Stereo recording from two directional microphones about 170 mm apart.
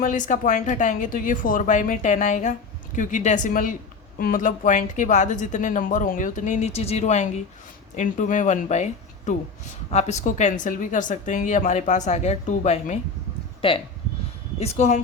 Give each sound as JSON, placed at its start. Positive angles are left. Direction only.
{"t": 0.0, "sound": "speech", "side_deg": 50}